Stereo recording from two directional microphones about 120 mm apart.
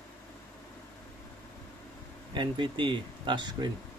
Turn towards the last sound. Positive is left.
turn(degrees=-40)  # may be behind; listen again after turning